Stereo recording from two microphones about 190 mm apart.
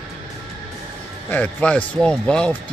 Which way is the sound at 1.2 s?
10° left (ahead or behind).